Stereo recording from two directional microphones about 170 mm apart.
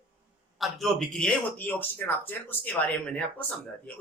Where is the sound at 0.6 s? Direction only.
Centre (ahead or behind).